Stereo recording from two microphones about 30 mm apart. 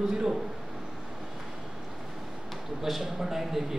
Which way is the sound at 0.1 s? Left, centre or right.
Right.